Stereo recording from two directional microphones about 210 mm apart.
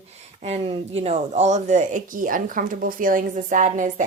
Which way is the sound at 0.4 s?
30° right (ahead or behind).